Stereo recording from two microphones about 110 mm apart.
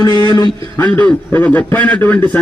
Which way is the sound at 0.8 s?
15° left (ahead or behind).